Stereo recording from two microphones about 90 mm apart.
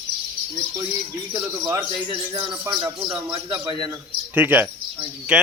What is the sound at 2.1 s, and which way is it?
Music, 65° right (ahead or behind).